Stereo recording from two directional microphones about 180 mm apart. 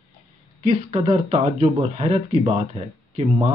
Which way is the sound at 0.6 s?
35° right (ahead or behind).